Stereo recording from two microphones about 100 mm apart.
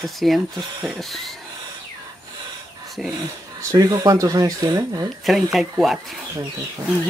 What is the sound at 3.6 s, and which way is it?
Speech, 35° right (ahead or behind).